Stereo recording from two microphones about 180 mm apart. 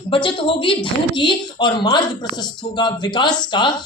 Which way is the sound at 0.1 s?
30° left (ahead or behind).